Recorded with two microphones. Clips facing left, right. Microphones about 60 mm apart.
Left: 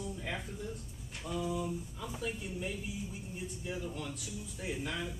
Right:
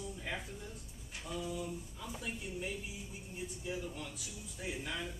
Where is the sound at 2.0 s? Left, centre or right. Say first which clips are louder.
Left 3 dB; centre.